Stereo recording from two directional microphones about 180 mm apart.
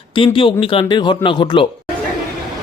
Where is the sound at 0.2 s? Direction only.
30° left (ahead or behind).